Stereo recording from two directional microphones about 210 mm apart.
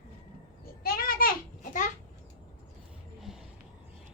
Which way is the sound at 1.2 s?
45° left (ahead or behind).